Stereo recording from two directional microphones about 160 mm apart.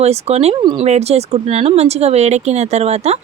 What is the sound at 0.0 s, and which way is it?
Speech, 40° right (ahead or behind).